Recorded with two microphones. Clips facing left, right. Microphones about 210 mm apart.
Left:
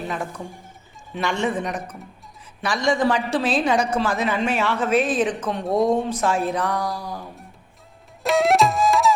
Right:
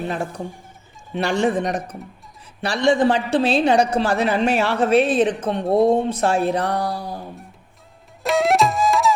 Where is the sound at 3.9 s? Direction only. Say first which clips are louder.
Right 3 dB; 35° right (ahead or behind).